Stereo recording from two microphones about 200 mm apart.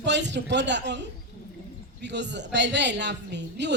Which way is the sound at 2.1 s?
60° right (ahead or behind).